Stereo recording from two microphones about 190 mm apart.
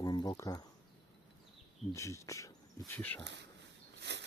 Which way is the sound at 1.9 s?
15° left (ahead or behind).